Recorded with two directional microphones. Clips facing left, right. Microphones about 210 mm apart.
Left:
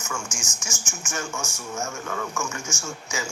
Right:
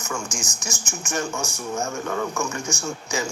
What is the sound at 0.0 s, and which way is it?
Speech, 35° right (ahead or behind).